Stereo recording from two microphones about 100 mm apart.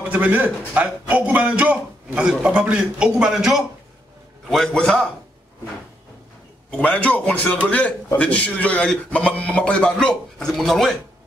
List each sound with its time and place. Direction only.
0.1 s a man's voice: 15° right (ahead or behind)
4.5 s a man's voice: 5° left (ahead or behind)
6.8 s a man's voice: 15° left (ahead or behind)